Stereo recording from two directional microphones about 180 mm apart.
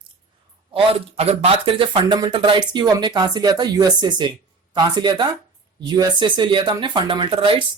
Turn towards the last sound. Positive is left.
turn(degrees=-30)  # may be behind; listen again after turning